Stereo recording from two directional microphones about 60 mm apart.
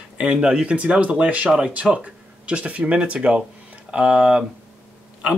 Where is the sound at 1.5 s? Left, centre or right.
Centre.